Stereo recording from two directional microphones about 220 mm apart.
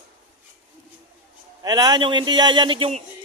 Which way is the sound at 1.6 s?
20° right (ahead or behind).